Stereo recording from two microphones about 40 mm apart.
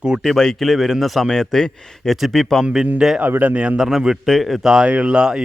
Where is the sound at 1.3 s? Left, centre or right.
Centre.